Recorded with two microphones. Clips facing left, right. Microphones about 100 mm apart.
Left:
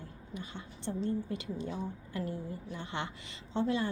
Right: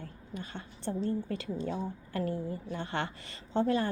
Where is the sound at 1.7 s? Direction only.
55° right (ahead or behind).